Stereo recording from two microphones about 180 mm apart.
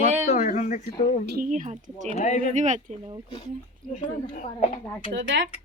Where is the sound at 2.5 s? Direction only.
45° right (ahead or behind).